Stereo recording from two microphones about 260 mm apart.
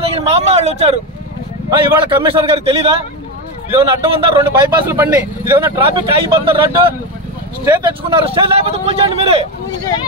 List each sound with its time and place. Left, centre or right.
0.0 s speech: right
4.5 s speech: centre
7.6 s speech: centre